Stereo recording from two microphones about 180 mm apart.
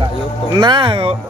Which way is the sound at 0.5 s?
25° right (ahead or behind).